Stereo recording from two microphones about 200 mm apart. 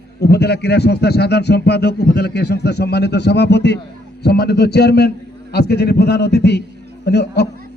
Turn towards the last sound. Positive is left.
turn(degrees=55)  # may be behind; listen again after turning